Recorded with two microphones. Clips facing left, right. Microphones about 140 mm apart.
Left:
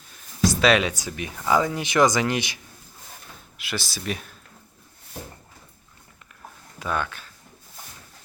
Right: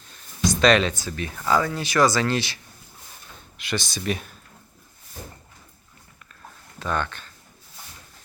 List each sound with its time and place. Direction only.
0.6 s speech: 10° left (ahead or behind)
3.6 s speech: 5° left (ahead or behind)
6.7 s speech: 5° left (ahead or behind)